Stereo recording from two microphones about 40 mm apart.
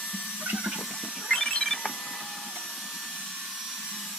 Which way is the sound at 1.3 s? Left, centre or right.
Centre.